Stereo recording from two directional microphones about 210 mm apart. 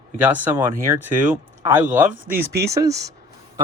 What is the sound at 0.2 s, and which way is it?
Speech, 10° right (ahead or behind).